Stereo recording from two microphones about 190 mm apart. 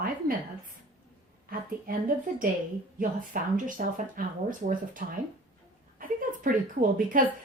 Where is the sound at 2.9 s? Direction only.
45° right (ahead or behind).